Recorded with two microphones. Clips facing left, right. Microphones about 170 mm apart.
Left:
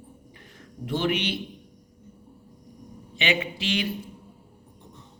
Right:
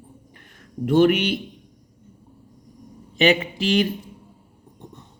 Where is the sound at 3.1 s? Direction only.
40° right (ahead or behind).